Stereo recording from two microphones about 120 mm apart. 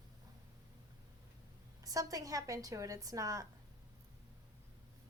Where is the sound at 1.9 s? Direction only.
30° right (ahead or behind).